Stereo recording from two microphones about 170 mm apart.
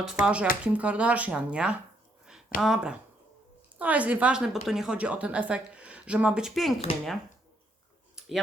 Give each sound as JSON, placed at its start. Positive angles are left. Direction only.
{"t": 0.0, "sound": "a woman's voice", "side_deg": -5}